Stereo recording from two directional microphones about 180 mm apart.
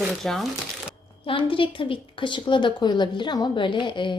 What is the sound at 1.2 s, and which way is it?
A woman's voice, 30° left (ahead or behind).